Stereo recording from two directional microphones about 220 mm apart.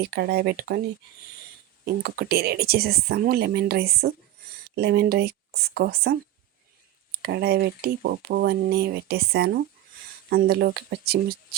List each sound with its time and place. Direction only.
0.0 s speech: 45° right (ahead or behind)
1.8 s speech: 45° right (ahead or behind)
7.2 s speech: 45° right (ahead or behind)